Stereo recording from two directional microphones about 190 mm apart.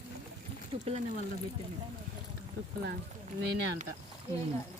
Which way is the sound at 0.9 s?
35° right (ahead or behind).